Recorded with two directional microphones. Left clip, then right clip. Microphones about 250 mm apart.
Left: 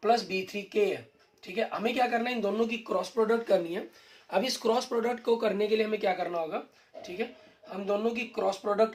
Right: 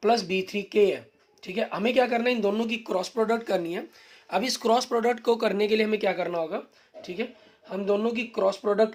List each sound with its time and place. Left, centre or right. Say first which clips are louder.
0.0 s speech: right 3 dB; right
7.7 s speech: right 4 dB; right